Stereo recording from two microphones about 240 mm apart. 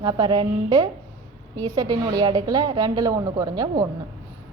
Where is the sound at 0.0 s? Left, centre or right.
Centre.